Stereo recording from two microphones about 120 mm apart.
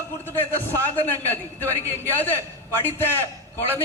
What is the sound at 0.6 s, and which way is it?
A man's voice, 15° left (ahead or behind).